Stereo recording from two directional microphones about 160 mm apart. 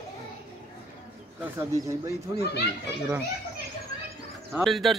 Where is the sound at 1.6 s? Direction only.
20° right (ahead or behind).